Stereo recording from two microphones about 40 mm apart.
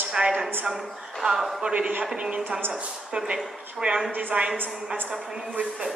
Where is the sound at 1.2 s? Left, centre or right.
Centre.